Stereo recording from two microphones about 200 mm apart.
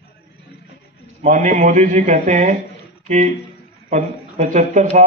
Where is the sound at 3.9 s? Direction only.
35° right (ahead or behind).